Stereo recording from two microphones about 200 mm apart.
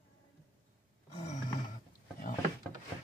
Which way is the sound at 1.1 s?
40° left (ahead or behind).